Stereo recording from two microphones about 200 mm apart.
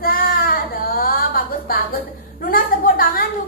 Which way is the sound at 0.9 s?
45° left (ahead or behind).